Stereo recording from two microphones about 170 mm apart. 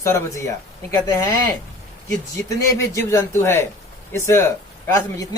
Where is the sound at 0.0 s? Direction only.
15° left (ahead or behind).